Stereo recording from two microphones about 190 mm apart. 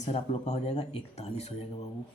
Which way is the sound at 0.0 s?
35° left (ahead or behind).